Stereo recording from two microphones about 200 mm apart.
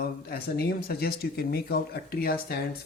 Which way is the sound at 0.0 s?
50° left (ahead or behind).